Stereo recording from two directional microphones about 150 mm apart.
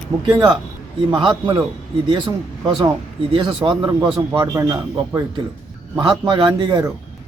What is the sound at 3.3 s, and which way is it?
A man's voice, 35° right (ahead or behind).